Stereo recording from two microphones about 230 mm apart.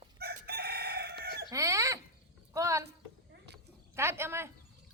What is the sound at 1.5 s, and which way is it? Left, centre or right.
Chicken, centre.